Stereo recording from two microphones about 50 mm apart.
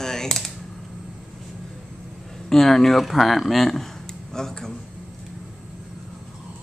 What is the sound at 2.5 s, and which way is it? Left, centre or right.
Speech, centre.